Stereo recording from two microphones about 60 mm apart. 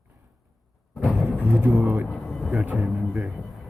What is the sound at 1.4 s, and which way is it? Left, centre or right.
Speech, right.